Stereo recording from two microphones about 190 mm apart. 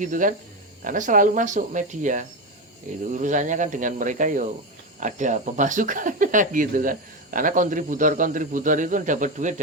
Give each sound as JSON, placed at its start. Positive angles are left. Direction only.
{"t": 0.0, "sound": "speech", "side_deg": -45}